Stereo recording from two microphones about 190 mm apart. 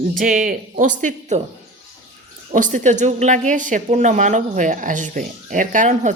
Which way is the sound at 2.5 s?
45° right (ahead or behind).